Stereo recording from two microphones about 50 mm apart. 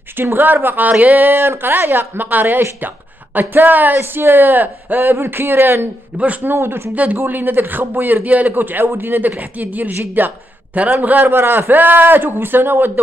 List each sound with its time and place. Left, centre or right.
0.1 s a man's voice: right
5.1 s speech: right
6.1 s speech: right
6.4 s speech: right
7.2 s a man's voice: right
11.3 s speech: right